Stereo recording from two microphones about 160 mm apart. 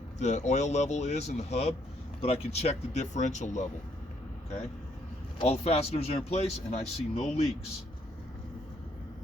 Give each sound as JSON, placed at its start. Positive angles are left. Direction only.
{"t": 0.2, "sound": "speech", "side_deg": 45}
{"t": 5.4, "sound": "speech", "side_deg": 40}